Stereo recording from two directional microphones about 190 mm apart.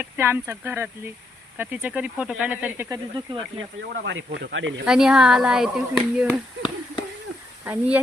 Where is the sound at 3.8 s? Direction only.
75° right (ahead or behind).